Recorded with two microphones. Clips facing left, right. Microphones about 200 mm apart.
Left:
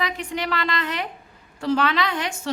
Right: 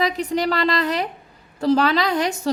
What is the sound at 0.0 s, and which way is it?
A woman's voice, 35° right (ahead or behind).